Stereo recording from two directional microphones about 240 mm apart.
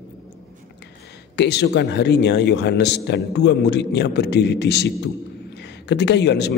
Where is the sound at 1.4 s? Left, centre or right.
Left.